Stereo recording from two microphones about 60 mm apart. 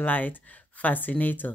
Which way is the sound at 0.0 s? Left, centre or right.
Left.